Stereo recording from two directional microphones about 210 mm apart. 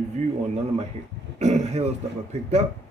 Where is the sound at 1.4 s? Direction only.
30° right (ahead or behind).